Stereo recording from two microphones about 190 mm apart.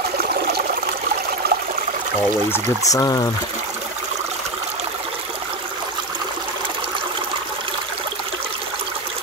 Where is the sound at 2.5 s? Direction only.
20° left (ahead or behind).